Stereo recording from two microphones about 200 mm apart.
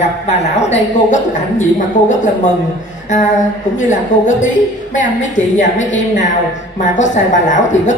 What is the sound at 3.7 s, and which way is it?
Speech, 40° left (ahead or behind).